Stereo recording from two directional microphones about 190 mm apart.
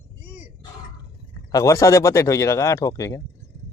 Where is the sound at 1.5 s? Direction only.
15° left (ahead or behind).